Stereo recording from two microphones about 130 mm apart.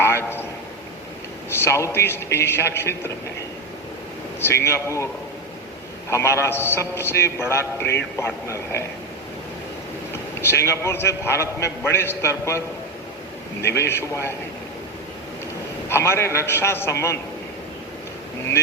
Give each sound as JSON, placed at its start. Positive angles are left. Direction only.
{"t": 0.0, "sound": "a sound", "side_deg": 15}
{"t": 1.6, "sound": "a man's voice", "side_deg": 20}
{"t": 4.4, "sound": "a man's voice", "side_deg": 20}
{"t": 6.1, "sound": "a man's voice", "side_deg": 20}
{"t": 10.5, "sound": "a man's voice", "side_deg": 20}
{"t": 13.7, "sound": "a man's voice", "side_deg": 20}
{"t": 15.9, "sound": "a man's voice", "side_deg": 20}